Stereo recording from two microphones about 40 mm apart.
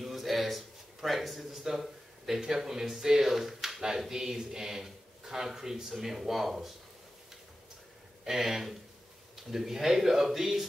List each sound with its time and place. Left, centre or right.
0.0 s speech: centre
8.3 s speech: centre